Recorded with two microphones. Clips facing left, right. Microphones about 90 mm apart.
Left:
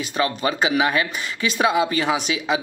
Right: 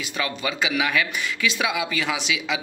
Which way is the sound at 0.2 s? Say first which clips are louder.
Left 5 dB; 40° left (ahead or behind).